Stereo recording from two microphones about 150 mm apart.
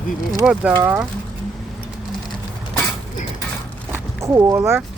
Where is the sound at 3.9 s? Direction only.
15° right (ahead or behind).